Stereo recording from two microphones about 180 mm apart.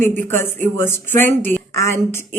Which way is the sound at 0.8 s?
10° left (ahead or behind).